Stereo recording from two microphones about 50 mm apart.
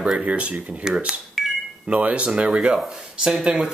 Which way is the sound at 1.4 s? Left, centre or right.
Centre.